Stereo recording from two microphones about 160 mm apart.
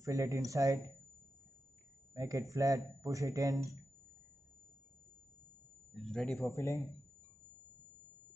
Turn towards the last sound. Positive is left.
turn(degrees=20)  # may be behind; listen again after turning